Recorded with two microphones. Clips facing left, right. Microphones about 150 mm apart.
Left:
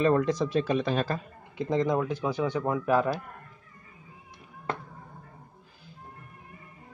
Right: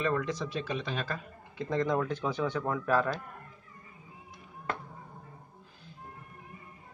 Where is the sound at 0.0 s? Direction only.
35° left (ahead or behind).